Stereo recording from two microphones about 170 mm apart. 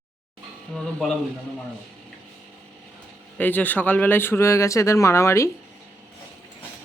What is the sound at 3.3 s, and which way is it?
Speech, 10° left (ahead or behind).